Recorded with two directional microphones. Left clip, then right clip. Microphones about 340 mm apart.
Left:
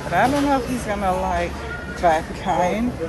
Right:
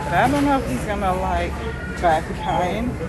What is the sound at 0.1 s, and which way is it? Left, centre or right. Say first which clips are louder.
Speech: even; centre.